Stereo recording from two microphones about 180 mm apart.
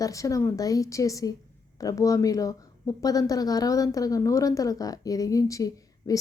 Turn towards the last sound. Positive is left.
turn(degrees=20)  # may be behind; listen again after turning